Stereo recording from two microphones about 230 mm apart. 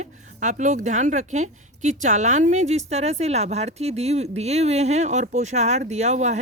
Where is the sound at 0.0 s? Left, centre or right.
Right.